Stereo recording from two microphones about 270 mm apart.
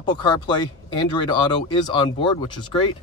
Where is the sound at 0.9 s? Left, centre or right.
Centre.